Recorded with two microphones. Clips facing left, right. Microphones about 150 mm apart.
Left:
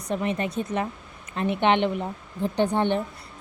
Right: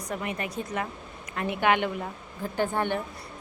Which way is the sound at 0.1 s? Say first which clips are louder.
Left 6 dB; 25° left (ahead or behind).